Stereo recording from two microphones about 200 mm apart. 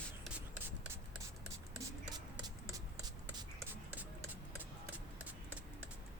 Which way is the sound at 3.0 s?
20° right (ahead or behind).